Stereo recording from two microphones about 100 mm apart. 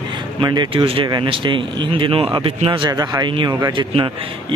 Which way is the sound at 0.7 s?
65° right (ahead or behind).